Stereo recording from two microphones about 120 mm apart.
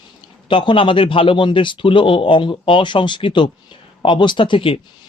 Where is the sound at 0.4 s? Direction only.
45° left (ahead or behind).